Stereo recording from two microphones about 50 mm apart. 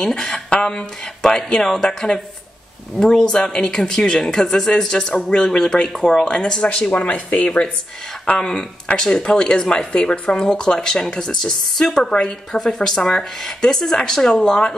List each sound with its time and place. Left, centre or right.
0.0 s speech: centre
6.9 s speech: left
8.4 s speech: centre